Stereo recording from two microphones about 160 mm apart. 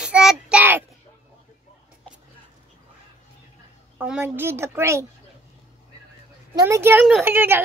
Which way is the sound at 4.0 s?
10° right (ahead or behind).